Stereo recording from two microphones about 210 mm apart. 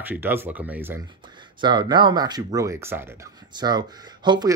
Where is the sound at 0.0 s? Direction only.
10° right (ahead or behind).